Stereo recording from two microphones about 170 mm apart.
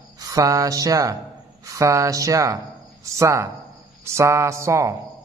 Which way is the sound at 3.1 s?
15° right (ahead or behind).